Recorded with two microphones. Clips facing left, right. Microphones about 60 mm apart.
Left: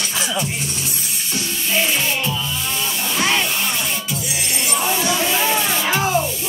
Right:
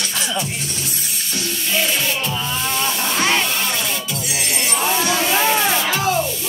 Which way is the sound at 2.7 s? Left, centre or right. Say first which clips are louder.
Right 3 dB; right.